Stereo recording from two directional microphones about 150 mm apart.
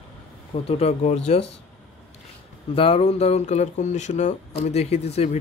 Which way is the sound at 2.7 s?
40° left (ahead or behind).